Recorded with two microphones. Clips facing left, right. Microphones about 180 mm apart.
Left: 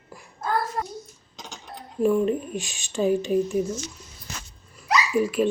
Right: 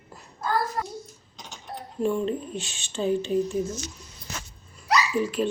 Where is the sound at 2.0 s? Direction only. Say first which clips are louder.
Left 4 dB; 5° left (ahead or behind).